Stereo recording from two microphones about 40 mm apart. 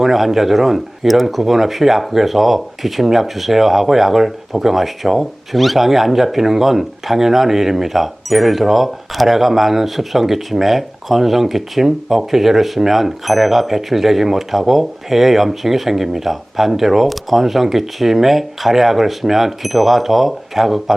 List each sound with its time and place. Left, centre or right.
0.0 s speech: centre